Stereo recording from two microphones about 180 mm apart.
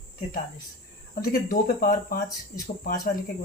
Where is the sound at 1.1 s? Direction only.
55° left (ahead or behind).